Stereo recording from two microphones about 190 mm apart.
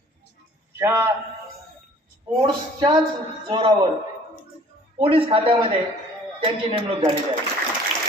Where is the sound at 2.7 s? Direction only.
20° right (ahead or behind).